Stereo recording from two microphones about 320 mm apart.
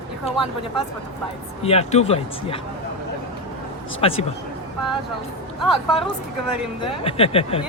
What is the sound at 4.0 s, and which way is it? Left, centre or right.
Speech, centre.